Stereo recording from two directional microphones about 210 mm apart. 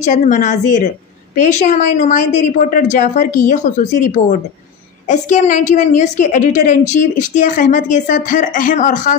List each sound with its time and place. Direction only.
0.0 s a woman's voice: 35° left (ahead or behind)